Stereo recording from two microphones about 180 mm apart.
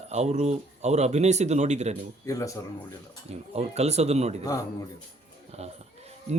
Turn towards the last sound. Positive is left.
turn(degrees=-40)  # may be behind; listen again after turning